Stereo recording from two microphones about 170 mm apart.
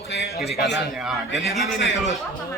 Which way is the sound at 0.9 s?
Centre (ahead or behind).